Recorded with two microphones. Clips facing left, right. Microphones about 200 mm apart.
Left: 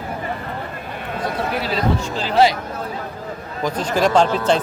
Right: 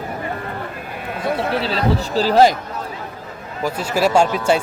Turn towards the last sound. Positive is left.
turn(degrees=-10)  # may be behind; listen again after turning